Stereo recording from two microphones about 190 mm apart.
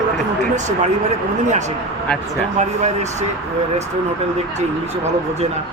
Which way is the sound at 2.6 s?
35° right (ahead or behind).